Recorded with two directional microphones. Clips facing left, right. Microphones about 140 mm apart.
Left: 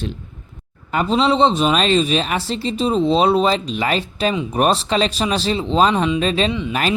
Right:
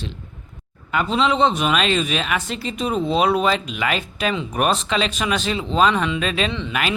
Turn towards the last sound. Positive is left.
turn(degrees=15)  # may be behind; listen again after turning